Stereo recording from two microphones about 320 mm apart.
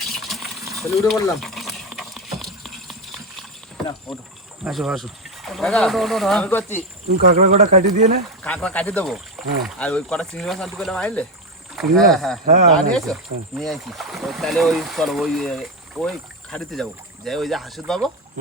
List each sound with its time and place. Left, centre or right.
0.0 s gush: centre
4.6 s speech: centre
7.1 s speech: right
8.4 s speech: centre